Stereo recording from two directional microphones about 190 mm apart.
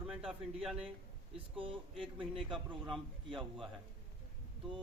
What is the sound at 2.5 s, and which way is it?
Speech, centre (ahead or behind).